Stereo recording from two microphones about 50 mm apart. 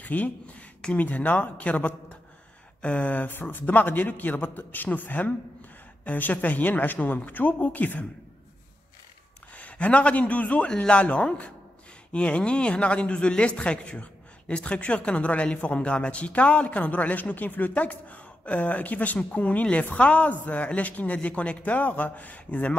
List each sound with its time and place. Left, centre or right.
0.0 s a sound: left
0.9 s speech: left
9.6 s a man's voice: left